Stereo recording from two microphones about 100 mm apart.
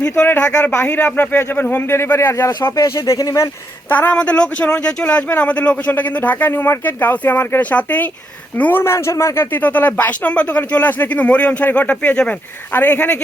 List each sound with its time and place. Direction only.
0.6 s speech: 25° left (ahead or behind)
2.5 s speech: 45° left (ahead or behind)
2.9 s speech: 35° left (ahead or behind)
3.8 s speech: 15° left (ahead or behind)